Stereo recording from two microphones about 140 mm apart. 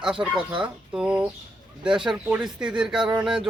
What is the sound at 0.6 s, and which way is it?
Fowl, 5° right (ahead or behind).